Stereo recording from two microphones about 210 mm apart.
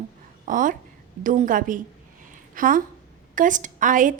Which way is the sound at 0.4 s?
40° right (ahead or behind).